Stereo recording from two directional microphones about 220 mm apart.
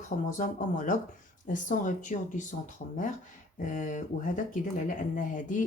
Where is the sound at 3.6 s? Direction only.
35° left (ahead or behind).